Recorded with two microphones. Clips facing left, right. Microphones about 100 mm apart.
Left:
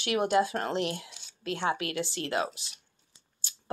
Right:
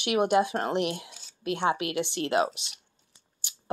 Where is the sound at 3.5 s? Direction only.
15° right (ahead or behind).